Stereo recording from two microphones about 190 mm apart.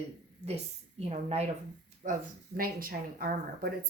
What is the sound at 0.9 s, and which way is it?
Speech, 35° right (ahead or behind).